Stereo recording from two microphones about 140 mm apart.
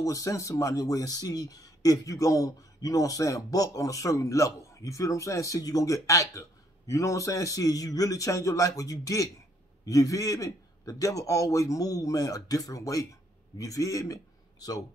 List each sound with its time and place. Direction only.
0.0 s speech: 25° left (ahead or behind)